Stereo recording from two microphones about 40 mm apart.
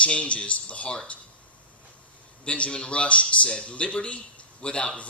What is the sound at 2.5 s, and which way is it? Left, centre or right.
Speech, left.